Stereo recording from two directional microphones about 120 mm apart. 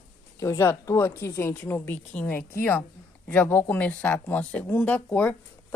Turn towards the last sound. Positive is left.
turn(degrees=15)  # may be behind; listen again after turning